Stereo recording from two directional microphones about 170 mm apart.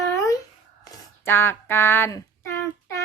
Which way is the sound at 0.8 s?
15° left (ahead or behind).